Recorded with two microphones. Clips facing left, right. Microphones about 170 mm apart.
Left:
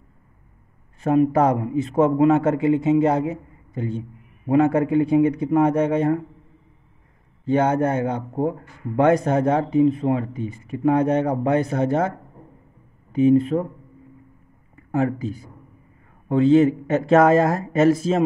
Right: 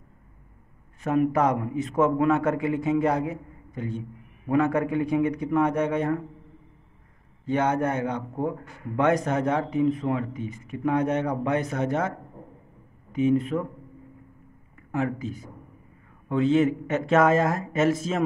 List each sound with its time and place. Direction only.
1.0 s speech: 30° left (ahead or behind)
7.4 s a man's voice: 30° left (ahead or behind)
13.1 s a man's voice: 30° left (ahead or behind)
14.9 s a man's voice: 35° left (ahead or behind)